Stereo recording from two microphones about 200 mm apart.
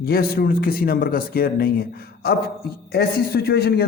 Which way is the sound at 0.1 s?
50° left (ahead or behind).